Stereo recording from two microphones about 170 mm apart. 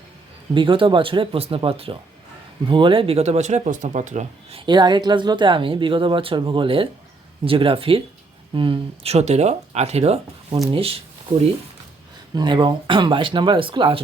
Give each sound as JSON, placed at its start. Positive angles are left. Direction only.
{"t": 0.5, "sound": "speech", "side_deg": -30}
{"t": 4.6, "sound": "speech", "side_deg": -25}
{"t": 12.3, "sound": "speech", "side_deg": -25}